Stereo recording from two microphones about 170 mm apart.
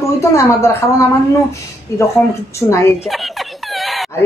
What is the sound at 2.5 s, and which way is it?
Speech, 15° left (ahead or behind).